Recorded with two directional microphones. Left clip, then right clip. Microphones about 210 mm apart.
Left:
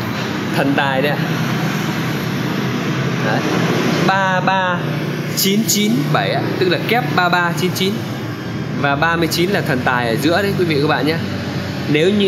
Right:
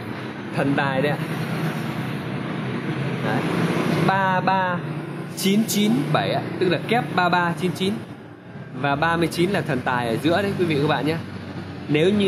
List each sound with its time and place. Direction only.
0.6 s speech: 5° right (ahead or behind)
4.1 s speech: 10° right (ahead or behind)